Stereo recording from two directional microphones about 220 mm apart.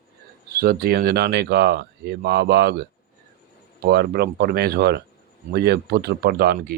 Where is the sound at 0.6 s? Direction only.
45° right (ahead or behind).